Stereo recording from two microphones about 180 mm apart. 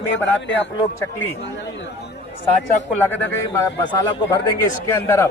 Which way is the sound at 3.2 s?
15° left (ahead or behind).